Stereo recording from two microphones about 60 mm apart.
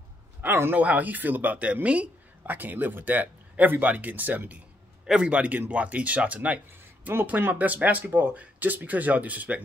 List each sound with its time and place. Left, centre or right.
0.4 s a man's voice: right
0.7 s a man's voice: right